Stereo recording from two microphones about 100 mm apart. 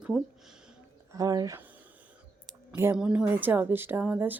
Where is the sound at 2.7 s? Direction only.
25° right (ahead or behind).